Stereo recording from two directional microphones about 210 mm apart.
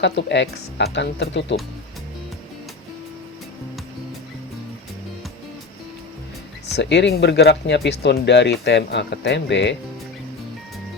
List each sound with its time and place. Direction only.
0.0 s speech: 55° left (ahead or behind)
6.7 s speech: 55° left (ahead or behind)